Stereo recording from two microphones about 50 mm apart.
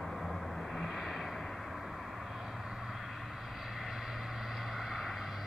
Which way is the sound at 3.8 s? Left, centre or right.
Centre.